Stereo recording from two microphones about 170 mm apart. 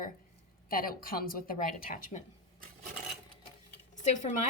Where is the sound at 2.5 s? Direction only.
50° right (ahead or behind).